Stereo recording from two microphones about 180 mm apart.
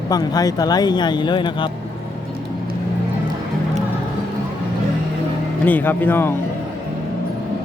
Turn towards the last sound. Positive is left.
turn(degrees=10)  # may be behind; listen again after turning